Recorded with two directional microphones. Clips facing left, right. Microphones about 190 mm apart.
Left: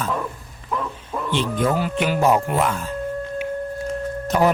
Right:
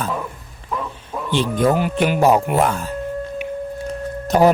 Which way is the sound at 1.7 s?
15° right (ahead or behind).